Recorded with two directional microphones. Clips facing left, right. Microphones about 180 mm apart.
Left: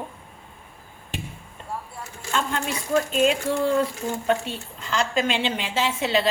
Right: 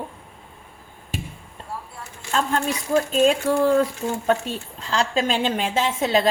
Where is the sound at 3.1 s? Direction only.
40° right (ahead or behind).